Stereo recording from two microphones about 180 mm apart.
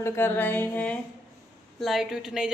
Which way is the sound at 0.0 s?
15° left (ahead or behind).